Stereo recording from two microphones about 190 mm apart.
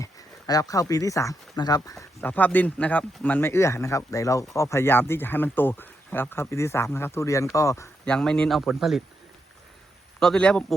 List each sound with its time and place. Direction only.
0.0 s speech: 20° left (ahead or behind)
8.0 s speech: 5° left (ahead or behind)
10.2 s speech: 5° left (ahead or behind)